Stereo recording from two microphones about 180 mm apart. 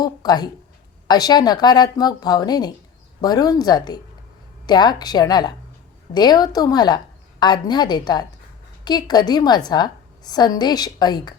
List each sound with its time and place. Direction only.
0.0 s a woman's voice: 20° left (ahead or behind)